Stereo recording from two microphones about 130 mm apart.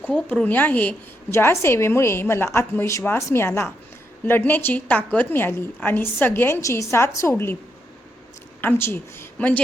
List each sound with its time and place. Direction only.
0.0 s a woman's voice: 10° left (ahead or behind)
8.6 s a woman's voice: 20° left (ahead or behind)